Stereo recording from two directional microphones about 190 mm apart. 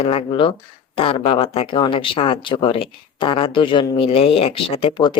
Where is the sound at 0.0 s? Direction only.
30° left (ahead or behind).